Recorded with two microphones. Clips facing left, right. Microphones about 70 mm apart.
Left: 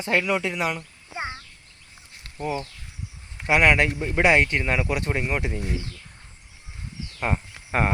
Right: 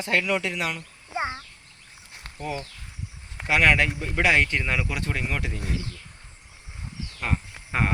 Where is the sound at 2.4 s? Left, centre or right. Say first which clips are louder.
Left 4 dB; centre.